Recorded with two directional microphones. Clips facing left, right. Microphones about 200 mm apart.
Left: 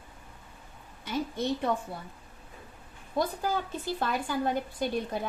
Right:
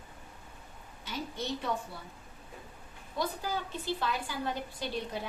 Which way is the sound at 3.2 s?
50° left (ahead or behind).